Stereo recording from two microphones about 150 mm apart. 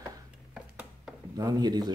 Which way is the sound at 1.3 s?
25° right (ahead or behind).